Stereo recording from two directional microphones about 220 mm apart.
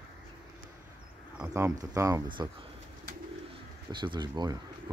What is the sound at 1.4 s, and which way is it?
Speech, 10° right (ahead or behind).